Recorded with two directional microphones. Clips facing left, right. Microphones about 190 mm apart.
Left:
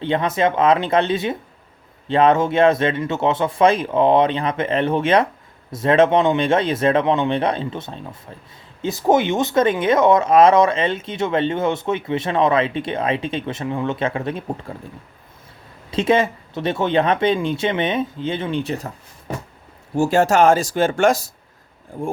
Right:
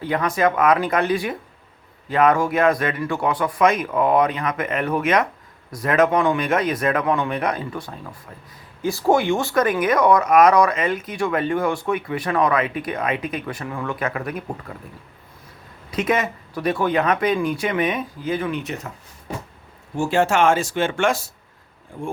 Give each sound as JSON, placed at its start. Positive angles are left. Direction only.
{"t": 0.0, "sound": "speech", "side_deg": 25}
{"t": 15.9, "sound": "speech", "side_deg": 30}
{"t": 20.0, "sound": "speech", "side_deg": 40}